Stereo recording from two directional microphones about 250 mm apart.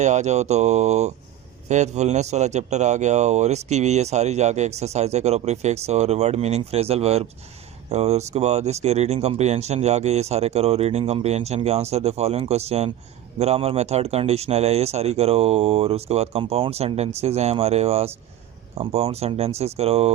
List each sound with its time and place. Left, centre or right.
0.0 s speech: right